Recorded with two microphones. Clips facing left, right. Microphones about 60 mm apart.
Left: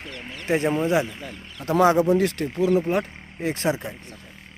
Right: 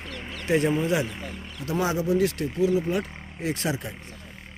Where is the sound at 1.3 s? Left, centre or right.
Centre.